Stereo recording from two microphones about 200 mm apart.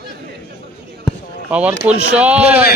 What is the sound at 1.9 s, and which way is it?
Speech, 5° right (ahead or behind).